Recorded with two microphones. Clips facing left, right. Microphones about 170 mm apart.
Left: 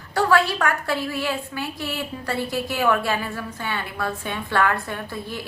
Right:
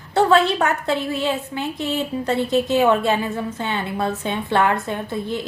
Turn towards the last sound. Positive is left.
turn(degrees=-20)  # may be behind; listen again after turning